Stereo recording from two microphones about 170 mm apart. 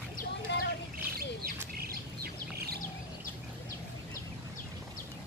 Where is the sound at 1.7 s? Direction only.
65° right (ahead or behind).